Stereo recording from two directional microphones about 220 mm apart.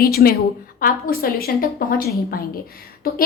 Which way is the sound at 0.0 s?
45° left (ahead or behind).